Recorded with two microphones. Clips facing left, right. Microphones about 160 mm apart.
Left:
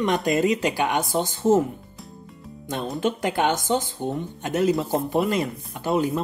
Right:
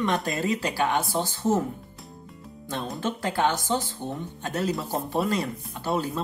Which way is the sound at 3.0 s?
20° left (ahead or behind).